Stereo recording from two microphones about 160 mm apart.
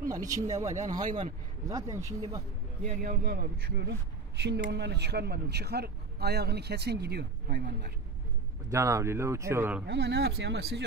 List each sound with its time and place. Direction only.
0.1 s speech: 20° right (ahead or behind)
0.7 s speech: 50° right (ahead or behind)
0.9 s speech: 25° right (ahead or behind)
2.8 s speech: 50° right (ahead or behind)
3.1 s a man's voice: 80° right
8.6 s speech: 20° right (ahead or behind)
9.8 s speech: 90° right